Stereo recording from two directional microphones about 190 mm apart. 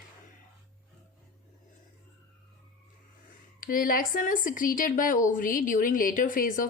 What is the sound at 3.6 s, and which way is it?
Speech, 45° left (ahead or behind).